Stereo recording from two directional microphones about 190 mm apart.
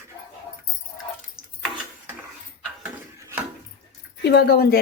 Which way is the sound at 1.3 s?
Centre (ahead or behind).